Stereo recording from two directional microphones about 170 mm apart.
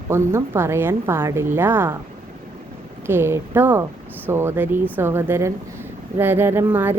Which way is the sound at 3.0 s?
15° right (ahead or behind).